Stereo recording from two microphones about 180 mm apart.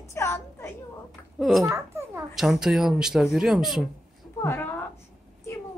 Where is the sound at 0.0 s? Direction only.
15° left (ahead or behind).